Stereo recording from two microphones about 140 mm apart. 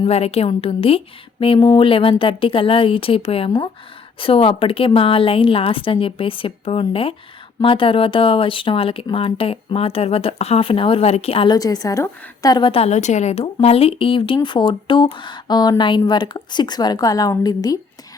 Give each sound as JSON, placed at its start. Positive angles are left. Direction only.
{"t": 0.0, "sound": "speech", "side_deg": 45}
{"t": 11.5, "sound": "a woman's voice", "side_deg": 25}
{"t": 12.7, "sound": "a woman's voice", "side_deg": 50}